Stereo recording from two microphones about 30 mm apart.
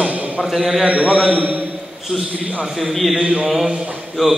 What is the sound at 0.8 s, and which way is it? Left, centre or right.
Speech, right.